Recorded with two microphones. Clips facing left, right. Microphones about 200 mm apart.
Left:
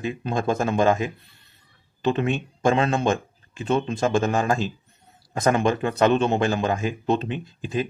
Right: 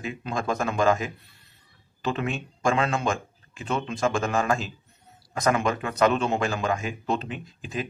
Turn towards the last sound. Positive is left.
turn(degrees=25)  # may be behind; listen again after turning